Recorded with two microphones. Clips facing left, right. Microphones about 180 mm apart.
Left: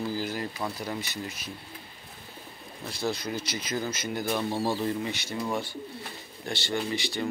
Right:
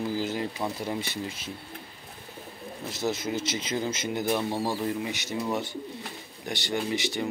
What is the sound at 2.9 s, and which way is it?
Speech, 20° right (ahead or behind).